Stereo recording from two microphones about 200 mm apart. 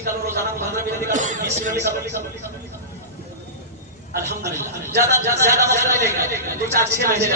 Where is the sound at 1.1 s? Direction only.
40° right (ahead or behind).